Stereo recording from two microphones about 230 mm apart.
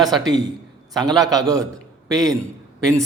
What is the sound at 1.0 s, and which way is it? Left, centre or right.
Speech, centre.